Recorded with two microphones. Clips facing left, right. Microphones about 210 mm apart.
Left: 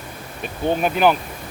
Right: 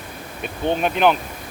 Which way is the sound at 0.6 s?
5° left (ahead or behind).